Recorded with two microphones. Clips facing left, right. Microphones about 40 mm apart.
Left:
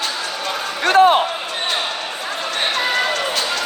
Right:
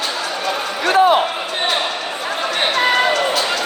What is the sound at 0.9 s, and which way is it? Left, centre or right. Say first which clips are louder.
Basketball bounce: left 1 dB; left.